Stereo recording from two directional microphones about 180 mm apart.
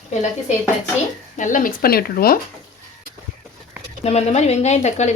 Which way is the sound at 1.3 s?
45° left (ahead or behind).